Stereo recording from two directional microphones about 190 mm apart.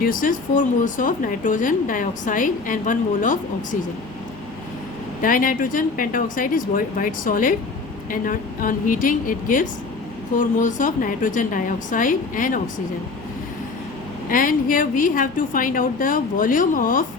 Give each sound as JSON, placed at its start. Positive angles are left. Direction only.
{"t": 0.0, "sound": "speech", "side_deg": 45}
{"t": 5.2, "sound": "speech", "side_deg": 45}
{"t": 14.3, "sound": "speech", "side_deg": 45}